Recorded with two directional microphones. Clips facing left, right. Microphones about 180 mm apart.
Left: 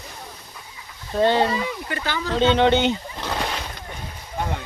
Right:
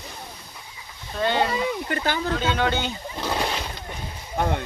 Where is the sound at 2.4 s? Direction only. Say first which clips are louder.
Left 7 dB; 25° left (ahead or behind).